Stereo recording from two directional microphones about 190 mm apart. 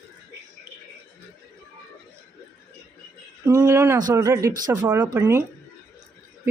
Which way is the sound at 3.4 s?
15° right (ahead or behind).